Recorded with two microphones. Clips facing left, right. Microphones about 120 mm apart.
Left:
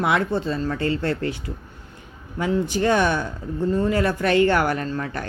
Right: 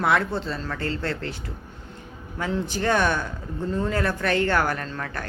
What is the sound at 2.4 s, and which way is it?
Speech, 15° left (ahead or behind).